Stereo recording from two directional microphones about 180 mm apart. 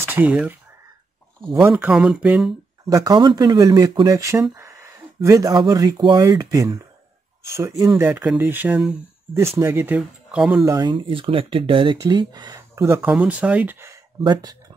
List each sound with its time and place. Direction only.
0.0 s speech: 10° right (ahead or behind)
2.9 s speech: 20° right (ahead or behind); by 10.6 s 5° right (ahead or behind)
10.6 s speech: 20° right (ahead or behind)